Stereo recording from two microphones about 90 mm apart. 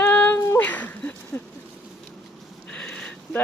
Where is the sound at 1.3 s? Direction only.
30° left (ahead or behind).